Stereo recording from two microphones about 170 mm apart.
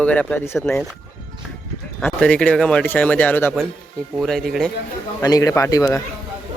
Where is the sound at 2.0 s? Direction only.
5° left (ahead or behind).